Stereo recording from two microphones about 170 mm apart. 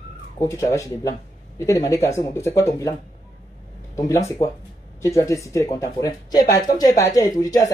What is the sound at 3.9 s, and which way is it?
Speech, 20° left (ahead or behind).